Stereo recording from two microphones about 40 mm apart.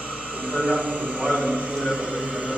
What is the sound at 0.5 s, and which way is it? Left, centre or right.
A man's voice, right.